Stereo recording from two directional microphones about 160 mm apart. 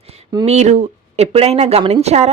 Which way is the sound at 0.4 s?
45° right (ahead or behind).